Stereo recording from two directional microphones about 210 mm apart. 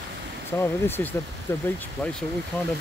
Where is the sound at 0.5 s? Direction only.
10° left (ahead or behind).